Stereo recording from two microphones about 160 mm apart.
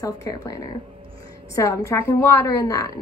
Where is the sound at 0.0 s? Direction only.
20° left (ahead or behind).